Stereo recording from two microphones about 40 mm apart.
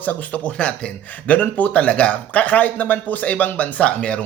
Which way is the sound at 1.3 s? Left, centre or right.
Left.